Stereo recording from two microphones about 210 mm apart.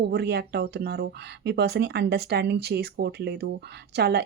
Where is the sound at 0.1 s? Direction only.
50° right (ahead or behind).